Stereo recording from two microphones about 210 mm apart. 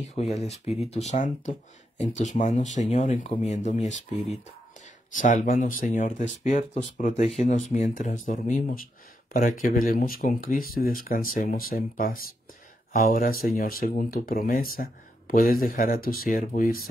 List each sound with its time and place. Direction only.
0.0 s speech: 30° left (ahead or behind)